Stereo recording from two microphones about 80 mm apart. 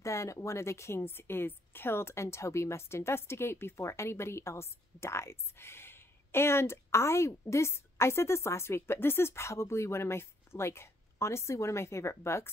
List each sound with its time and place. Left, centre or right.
0.0 s a woman's voice: left